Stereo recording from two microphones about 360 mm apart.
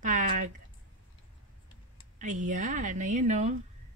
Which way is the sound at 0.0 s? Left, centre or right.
Right.